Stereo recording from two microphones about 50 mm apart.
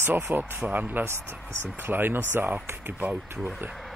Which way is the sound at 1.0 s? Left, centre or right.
Right.